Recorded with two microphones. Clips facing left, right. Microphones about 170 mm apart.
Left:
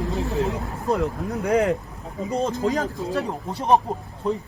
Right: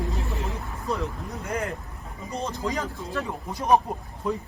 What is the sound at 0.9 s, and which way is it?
Speech, 70° left (ahead or behind).